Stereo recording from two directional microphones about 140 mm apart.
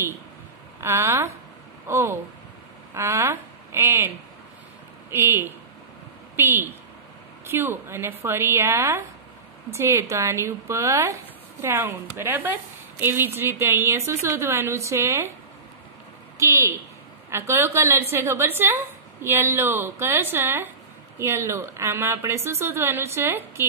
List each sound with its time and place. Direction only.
0.7 s speech: 20° right (ahead or behind)
5.1 s a woman's voice: 15° right (ahead or behind)
16.3 s a woman's voice: 20° right (ahead or behind)